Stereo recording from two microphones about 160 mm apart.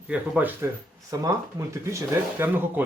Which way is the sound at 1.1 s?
20° right (ahead or behind).